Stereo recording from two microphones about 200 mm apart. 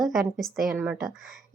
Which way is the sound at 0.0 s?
Centre (ahead or behind).